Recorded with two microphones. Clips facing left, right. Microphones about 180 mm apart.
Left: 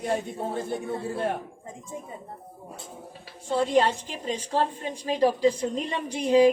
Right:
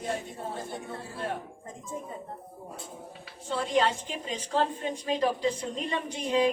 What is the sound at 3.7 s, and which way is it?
Speech, 40° left (ahead or behind).